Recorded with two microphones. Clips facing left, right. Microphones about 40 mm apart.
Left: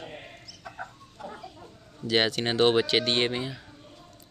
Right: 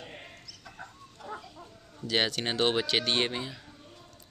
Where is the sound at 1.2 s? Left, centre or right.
Centre.